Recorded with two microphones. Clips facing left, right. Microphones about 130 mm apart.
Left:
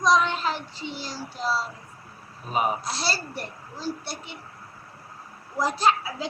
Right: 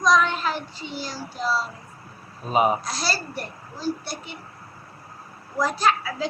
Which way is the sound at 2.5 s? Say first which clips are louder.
Right 5 dB; 20° right (ahead or behind).